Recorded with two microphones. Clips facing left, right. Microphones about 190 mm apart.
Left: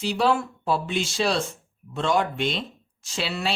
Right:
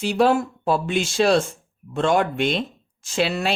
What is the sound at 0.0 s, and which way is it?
Speech, 50° right (ahead or behind).